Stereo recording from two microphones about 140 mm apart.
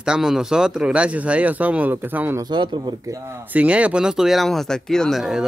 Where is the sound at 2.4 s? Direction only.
35° right (ahead or behind).